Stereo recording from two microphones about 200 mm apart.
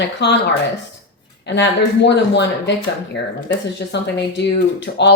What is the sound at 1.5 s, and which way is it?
Speech, 60° left (ahead or behind).